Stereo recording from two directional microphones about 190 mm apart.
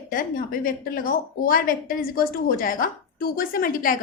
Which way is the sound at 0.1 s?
50° left (ahead or behind).